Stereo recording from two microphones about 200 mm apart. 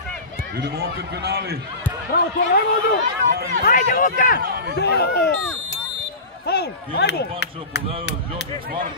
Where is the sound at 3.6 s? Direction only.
45° left (ahead or behind).